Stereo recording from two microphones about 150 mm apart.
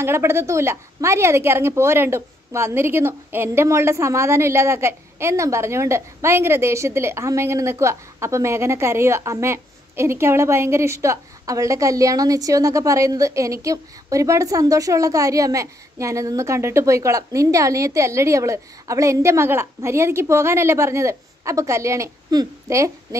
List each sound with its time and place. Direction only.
0.0 s a woman's voice: 15° right (ahead or behind)